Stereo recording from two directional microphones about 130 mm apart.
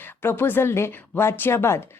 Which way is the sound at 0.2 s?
15° left (ahead or behind).